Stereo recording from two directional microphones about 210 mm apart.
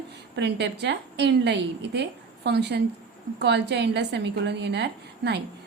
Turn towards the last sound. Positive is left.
turn(degrees=-55)  # may be behind; listen again after turning